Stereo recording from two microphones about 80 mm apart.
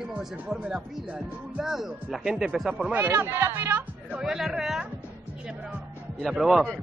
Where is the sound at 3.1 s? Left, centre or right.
Right.